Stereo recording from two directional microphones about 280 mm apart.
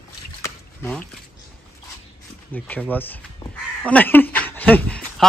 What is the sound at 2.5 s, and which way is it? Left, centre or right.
Speech, centre.